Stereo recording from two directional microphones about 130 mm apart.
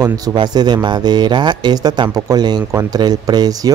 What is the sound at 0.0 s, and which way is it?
Speech, 30° right (ahead or behind).